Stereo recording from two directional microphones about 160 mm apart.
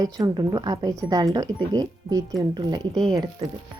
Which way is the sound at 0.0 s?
25° right (ahead or behind).